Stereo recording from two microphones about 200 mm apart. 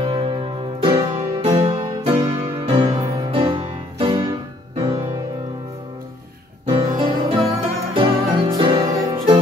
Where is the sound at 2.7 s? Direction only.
25° right (ahead or behind).